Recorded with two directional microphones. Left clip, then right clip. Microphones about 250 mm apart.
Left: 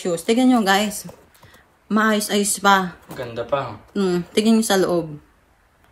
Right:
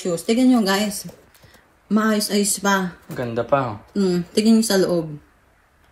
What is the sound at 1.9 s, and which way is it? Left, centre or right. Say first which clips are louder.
Speech: left 2 dB; centre.